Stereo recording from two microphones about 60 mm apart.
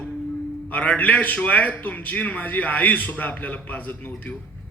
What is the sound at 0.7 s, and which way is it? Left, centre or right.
A man's voice, left.